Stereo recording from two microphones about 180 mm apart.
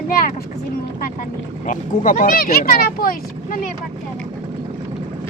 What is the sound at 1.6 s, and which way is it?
Speech, 45° left (ahead or behind).